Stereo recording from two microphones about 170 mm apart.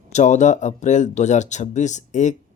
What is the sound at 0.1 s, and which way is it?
Speech, 45° left (ahead or behind).